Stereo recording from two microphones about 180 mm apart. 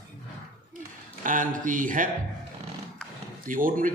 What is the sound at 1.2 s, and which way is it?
Speech, 50° right (ahead or behind).